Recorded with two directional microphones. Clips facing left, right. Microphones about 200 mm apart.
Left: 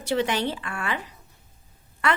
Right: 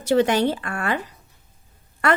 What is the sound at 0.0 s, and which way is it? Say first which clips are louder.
A woman's voice: right 6 dB; 45° right (ahead or behind).